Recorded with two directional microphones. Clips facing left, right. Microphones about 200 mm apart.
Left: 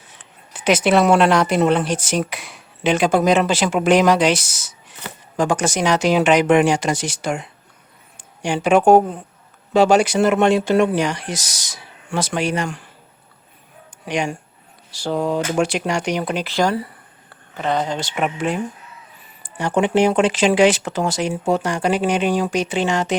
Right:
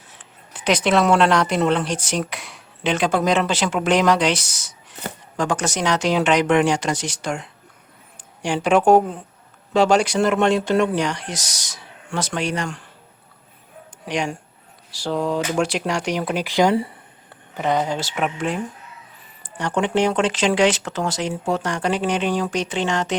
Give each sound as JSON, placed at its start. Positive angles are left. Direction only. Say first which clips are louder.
{"t": 0.1, "sound": "speech", "louder": "even", "side_deg": 0}
{"t": 5.0, "sound": "a sound", "louder": "right 3 dB", "side_deg": -50}
{"t": 5.4, "sound": "speech", "louder": "left 3 dB", "side_deg": 10}
{"t": 14.0, "sound": "speech", "louder": "left 2 dB", "side_deg": 0}